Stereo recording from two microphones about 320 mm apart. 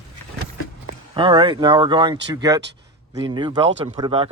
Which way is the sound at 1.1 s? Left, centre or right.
Centre.